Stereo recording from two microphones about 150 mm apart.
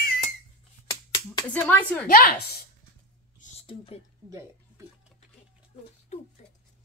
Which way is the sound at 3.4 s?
55° left (ahead or behind).